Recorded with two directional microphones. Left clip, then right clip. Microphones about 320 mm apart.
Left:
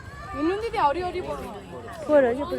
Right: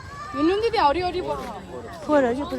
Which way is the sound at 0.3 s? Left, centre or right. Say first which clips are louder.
Right 4 dB; right.